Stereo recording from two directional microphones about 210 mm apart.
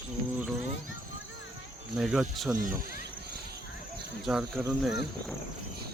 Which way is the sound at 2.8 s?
45° left (ahead or behind).